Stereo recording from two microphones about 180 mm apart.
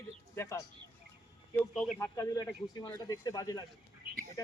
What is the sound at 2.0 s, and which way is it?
Speech, 20° left (ahead or behind).